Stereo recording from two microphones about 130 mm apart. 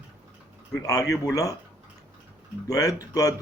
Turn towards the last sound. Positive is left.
turn(degrees=30)  # may be behind; listen again after turning